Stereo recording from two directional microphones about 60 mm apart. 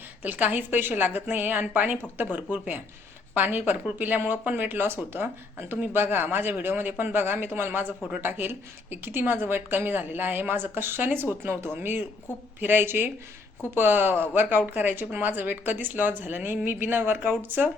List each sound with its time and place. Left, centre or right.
0.2 s a woman's voice: right